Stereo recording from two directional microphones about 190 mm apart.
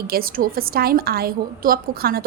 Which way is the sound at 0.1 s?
50° right (ahead or behind).